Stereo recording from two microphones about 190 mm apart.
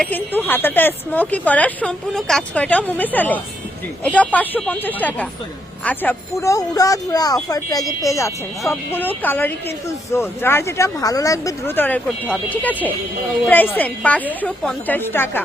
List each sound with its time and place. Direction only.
0.0 s speech: 10° left (ahead or behind)